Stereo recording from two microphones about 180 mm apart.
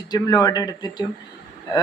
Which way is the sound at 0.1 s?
20° left (ahead or behind).